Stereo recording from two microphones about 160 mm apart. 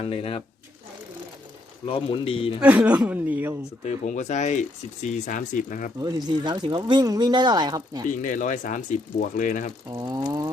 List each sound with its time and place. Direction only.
0.0 s a man's voice: 40° left (ahead or behind)
1.9 s a man's voice: 35° left (ahead or behind)
2.6 s speech: 10° right (ahead or behind)
3.8 s speech: 50° left (ahead or behind)
6.0 s speech: 25° right (ahead or behind)
8.2 s speech: 50° left (ahead or behind)
9.9 s speech: 25° right (ahead or behind)